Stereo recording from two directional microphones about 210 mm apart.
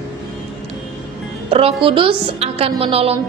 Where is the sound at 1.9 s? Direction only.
25° right (ahead or behind).